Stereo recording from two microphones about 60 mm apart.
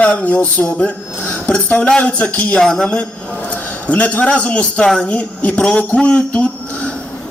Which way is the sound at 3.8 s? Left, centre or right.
Left.